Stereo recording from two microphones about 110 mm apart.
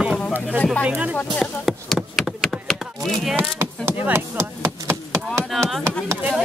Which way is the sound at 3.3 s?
20° right (ahead or behind).